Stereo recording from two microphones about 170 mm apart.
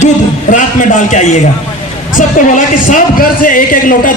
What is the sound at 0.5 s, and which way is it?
Speech, 45° left (ahead or behind).